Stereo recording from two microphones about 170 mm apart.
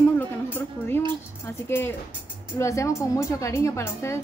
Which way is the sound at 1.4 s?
15° left (ahead or behind).